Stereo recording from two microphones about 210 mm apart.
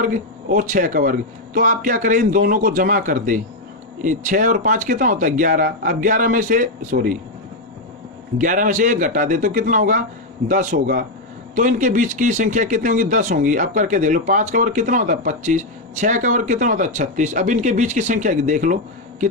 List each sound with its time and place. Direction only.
0.0 s speech: 40° right (ahead or behind)
8.4 s speech: 40° right (ahead or behind)